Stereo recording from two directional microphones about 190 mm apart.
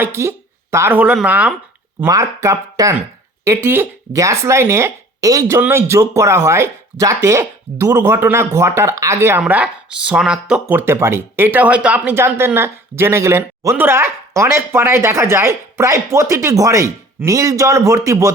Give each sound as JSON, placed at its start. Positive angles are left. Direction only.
{"t": 0.0, "sound": "speech", "side_deg": -15}